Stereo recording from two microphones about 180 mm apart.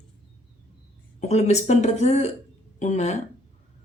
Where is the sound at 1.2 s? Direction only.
40° left (ahead or behind).